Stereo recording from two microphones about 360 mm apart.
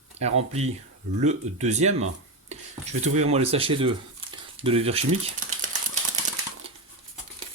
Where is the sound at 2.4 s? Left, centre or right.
Centre.